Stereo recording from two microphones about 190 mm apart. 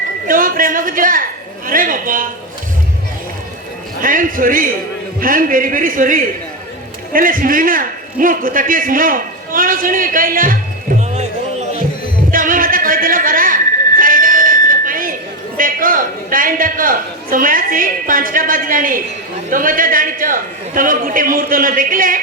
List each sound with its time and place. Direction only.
0.3 s a man's voice: 45° right (ahead or behind)
4.0 s a man's voice: 45° right (ahead or behind)
12.3 s a sound: 45° right (ahead or behind)
15.5 s a man's voice: 45° right (ahead or behind)